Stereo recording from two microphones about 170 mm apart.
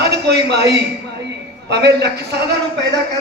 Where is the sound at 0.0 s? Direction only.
75° right (ahead or behind).